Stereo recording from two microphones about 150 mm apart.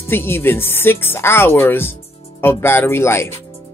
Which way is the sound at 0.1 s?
15° left (ahead or behind).